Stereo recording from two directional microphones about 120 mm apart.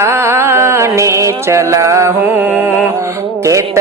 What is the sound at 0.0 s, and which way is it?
Music, 20° right (ahead or behind).